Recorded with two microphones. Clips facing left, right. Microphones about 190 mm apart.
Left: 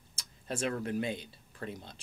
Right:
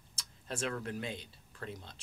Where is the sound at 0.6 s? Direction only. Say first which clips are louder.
Left 5 dB; 15° left (ahead or behind).